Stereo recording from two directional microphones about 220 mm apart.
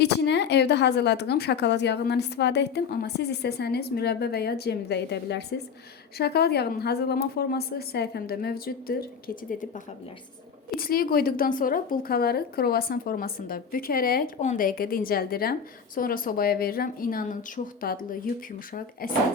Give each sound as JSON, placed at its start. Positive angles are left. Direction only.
{"t": 0.0, "sound": "a woman's voice", "side_deg": 50}
{"t": 10.8, "sound": "a woman's voice", "side_deg": 40}